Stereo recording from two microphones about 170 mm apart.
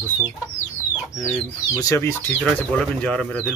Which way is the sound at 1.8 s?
20° left (ahead or behind).